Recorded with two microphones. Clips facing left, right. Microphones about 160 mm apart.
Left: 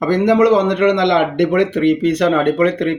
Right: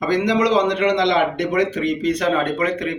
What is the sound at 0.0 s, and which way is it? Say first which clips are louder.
A man's voice: left 6 dB; 55° left (ahead or behind).